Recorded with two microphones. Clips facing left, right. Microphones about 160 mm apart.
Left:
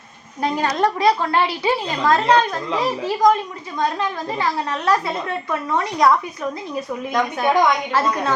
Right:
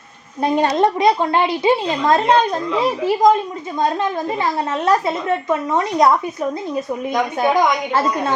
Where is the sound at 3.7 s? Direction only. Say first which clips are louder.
Right 3 dB; 25° right (ahead or behind).